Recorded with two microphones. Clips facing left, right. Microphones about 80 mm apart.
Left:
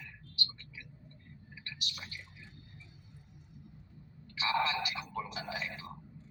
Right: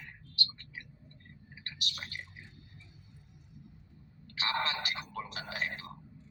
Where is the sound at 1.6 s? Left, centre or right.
Right.